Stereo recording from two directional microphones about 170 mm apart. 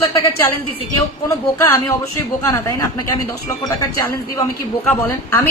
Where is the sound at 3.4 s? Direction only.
15° left (ahead or behind).